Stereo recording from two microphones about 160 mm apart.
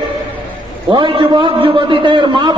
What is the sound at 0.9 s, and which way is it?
A man's voice, 30° right (ahead or behind).